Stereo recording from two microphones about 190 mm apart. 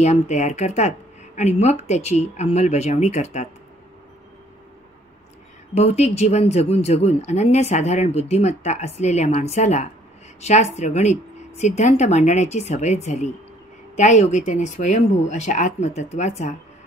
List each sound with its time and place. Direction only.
0.0 s speech: 35° left (ahead or behind)
5.8 s speech: 35° left (ahead or behind)